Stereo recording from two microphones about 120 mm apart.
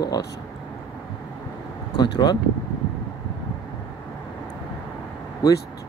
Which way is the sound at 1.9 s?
35° left (ahead or behind).